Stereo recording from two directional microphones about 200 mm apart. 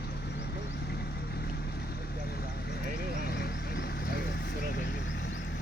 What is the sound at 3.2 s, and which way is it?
Vehicle, 55° left (ahead or behind).